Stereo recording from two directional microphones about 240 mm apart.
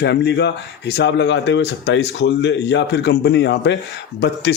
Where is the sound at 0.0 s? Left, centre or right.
Left.